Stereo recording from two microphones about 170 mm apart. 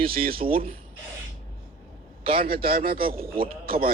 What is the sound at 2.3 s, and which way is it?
Speech, 60° right (ahead or behind).